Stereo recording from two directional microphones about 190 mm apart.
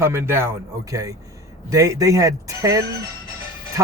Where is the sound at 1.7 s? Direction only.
15° right (ahead or behind).